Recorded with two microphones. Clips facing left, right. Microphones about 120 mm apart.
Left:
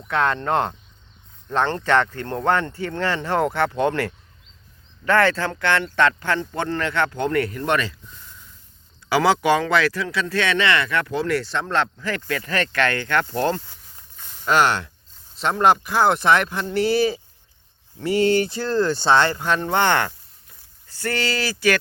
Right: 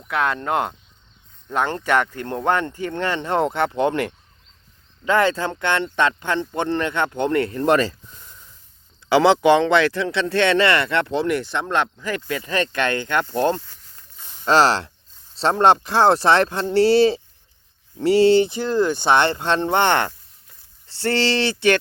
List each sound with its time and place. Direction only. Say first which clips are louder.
0.1 s speech: left 1 dB; 10° right (ahead or behind); by 7.9 s 35° right (ahead or behind)
9.0 s speech: right 4 dB; 25° right (ahead or behind)
14.4 s speech: right 2 dB; 30° right (ahead or behind)